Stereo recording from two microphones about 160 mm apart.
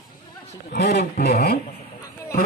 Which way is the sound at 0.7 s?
75° left (ahead or behind).